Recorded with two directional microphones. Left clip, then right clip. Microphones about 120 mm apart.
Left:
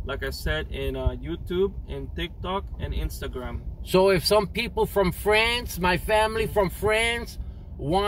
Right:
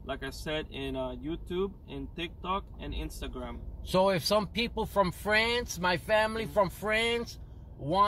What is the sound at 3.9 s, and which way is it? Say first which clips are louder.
Speech: left 6 dB; 25° right (ahead or behind).